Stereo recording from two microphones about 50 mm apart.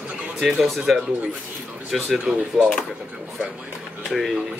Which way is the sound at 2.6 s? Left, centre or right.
Centre.